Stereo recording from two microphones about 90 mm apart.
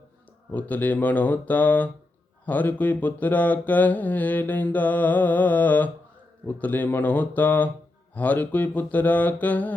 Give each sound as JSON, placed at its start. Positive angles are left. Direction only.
{"t": 0.5, "sound": "mantra", "side_deg": 20}
{"t": 6.5, "sound": "speech", "side_deg": 20}
{"t": 8.1, "sound": "mantra", "side_deg": 15}